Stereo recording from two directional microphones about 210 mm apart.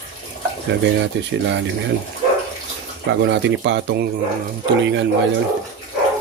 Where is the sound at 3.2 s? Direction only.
55° right (ahead or behind).